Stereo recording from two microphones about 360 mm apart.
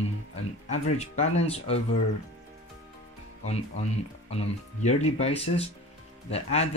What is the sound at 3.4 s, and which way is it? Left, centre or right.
Speech, centre.